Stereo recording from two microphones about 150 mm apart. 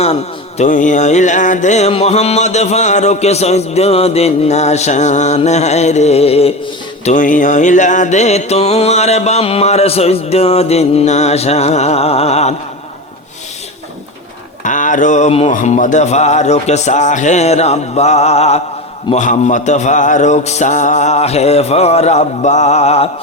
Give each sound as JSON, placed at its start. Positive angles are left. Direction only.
{"t": 0.0, "sound": "music", "side_deg": 45}
{"t": 7.0, "sound": "music", "side_deg": 55}
{"t": 14.6, "sound": "speech", "side_deg": 60}
{"t": 15.5, "sound": "music", "side_deg": 55}